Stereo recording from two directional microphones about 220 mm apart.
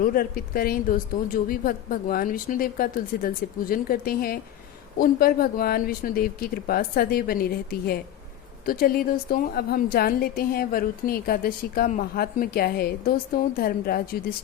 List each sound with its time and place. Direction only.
0.0 s a woman's voice: 40° left (ahead or behind)